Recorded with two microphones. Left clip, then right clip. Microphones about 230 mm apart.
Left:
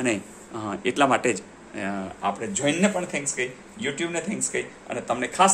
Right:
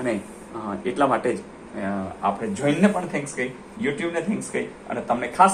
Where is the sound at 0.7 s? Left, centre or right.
Left.